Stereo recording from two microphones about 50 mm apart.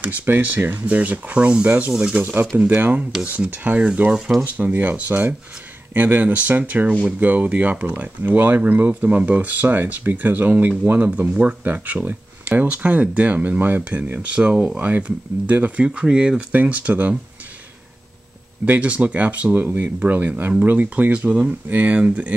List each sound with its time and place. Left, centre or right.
0.0 s speech: right; by 2.2 s centre
2.5 s speech: right
11.1 s speech: right
14.3 s speech: centre
14.8 s speech: right
15.8 s speech: right
18.8 s speech: right
19.5 s speech: right